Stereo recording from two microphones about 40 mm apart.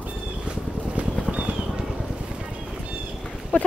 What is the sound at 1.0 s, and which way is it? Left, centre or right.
Vehicle, right.